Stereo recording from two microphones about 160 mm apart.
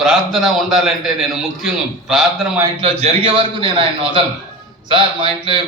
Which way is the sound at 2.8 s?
35° right (ahead or behind).